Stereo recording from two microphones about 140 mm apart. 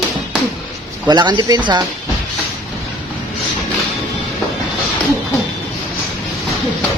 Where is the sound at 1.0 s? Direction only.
30° right (ahead or behind).